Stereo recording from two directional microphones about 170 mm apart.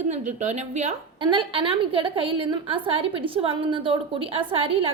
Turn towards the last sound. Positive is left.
turn(degrees=-35)  # may be behind; listen again after turning